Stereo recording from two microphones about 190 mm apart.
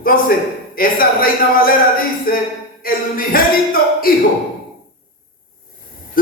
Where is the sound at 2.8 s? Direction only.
50° left (ahead or behind).